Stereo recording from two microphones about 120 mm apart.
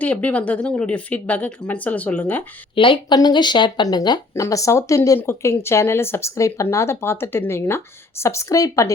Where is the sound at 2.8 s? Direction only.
45° left (ahead or behind); by 8.9 s 25° left (ahead or behind).